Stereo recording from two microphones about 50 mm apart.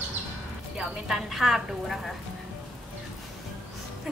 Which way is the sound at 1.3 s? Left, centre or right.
Centre.